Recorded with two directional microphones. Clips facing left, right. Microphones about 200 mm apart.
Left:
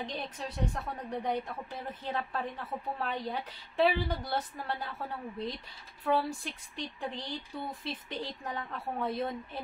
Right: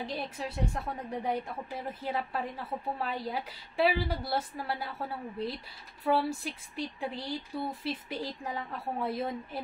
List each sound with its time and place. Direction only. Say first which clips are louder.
0.0 s a woman's voice: right 2 dB; 10° right (ahead or behind)